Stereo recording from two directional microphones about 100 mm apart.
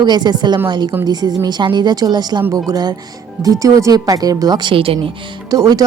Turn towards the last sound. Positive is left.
turn(degrees=-40)  # may be behind; listen again after turning